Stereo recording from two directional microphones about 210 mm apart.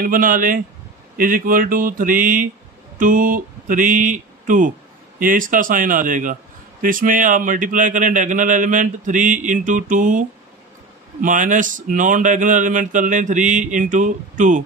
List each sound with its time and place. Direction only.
0.0 s a man's voice: 40° right (ahead or behind)